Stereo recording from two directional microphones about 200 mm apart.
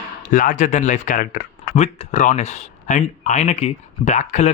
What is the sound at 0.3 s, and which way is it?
Speech, 40° left (ahead or behind).